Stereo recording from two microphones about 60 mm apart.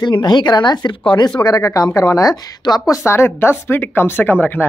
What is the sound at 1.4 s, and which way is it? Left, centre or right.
A woman's voice, left.